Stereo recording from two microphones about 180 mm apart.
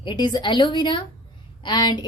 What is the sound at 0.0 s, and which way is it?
A woman's voice, 25° left (ahead or behind).